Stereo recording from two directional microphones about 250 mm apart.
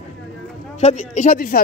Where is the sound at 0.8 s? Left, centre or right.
Left.